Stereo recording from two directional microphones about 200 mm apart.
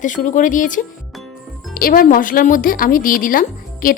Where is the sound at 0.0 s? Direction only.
40° left (ahead or behind).